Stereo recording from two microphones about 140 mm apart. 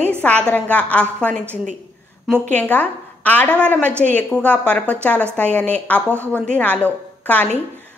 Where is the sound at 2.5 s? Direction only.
10° left (ahead or behind).